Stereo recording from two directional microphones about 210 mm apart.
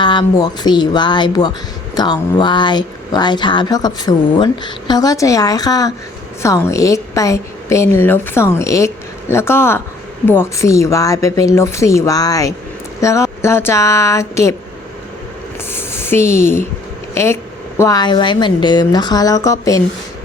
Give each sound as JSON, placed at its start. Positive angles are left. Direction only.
{"t": 0.0, "sound": "a woman's voice", "side_deg": 20}
{"t": 15.7, "sound": "speech", "side_deg": 10}
{"t": 17.7, "sound": "speech", "side_deg": 15}